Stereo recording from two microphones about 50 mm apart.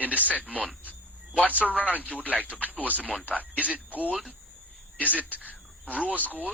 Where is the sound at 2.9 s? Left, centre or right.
Left.